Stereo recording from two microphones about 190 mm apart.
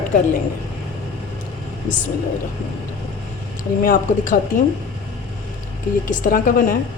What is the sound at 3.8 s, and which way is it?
Speech, 45° left (ahead or behind).